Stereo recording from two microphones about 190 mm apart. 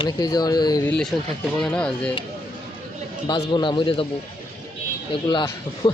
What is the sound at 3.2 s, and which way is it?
Speech, 25° left (ahead or behind).